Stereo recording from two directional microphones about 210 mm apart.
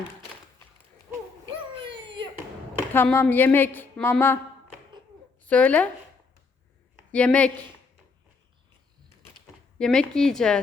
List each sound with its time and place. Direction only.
1.5 s a sound: 25° right (ahead or behind)
2.9 s a woman's voice: 10° left (ahead or behind)
5.4 s speech: 5° left (ahead or behind)
7.1 s a woman's voice: 5° left (ahead or behind)
9.7 s a woman's voice: 5° left (ahead or behind)